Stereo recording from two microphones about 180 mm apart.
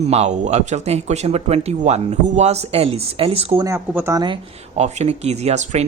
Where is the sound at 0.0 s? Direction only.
35° right (ahead or behind).